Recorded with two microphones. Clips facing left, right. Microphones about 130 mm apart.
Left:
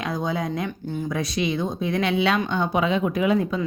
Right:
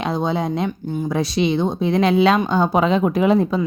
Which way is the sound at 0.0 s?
30° right (ahead or behind).